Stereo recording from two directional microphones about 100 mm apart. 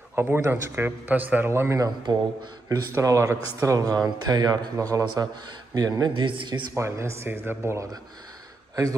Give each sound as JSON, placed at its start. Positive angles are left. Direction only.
{"t": 0.1, "sound": "a man's voice", "side_deg": -25}
{"t": 2.1, "sound": "speech", "side_deg": -45}
{"t": 2.9, "sound": "speech", "side_deg": -30}
{"t": 6.7, "sound": "a man's voice", "side_deg": -25}